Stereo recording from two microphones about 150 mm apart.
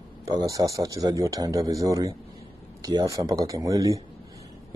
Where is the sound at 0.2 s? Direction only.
25° right (ahead or behind).